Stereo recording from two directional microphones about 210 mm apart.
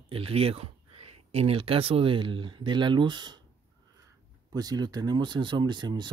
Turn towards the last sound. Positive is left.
turn(degrees=-20)  # may be behind; listen again after turning